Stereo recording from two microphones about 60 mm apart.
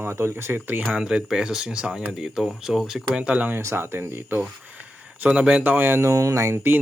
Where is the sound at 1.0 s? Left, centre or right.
Centre.